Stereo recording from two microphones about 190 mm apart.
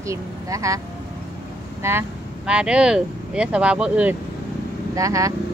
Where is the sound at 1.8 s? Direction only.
10° right (ahead or behind).